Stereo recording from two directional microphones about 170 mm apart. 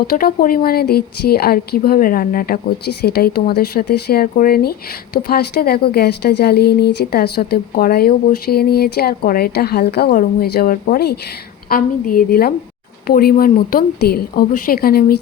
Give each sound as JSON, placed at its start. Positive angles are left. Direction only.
{"t": 0.0, "sound": "a woman's voice", "side_deg": 60}